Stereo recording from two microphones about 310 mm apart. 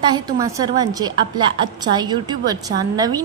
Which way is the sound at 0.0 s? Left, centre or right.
Centre.